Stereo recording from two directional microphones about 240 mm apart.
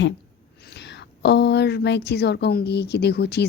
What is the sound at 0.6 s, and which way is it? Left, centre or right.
A woman's voice, left.